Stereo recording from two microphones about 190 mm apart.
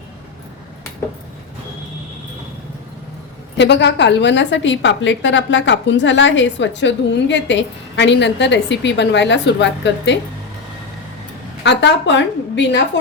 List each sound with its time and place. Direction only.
3.6 s a woman's voice: 65° left (ahead or behind)
11.6 s a woman's voice: 65° left (ahead or behind)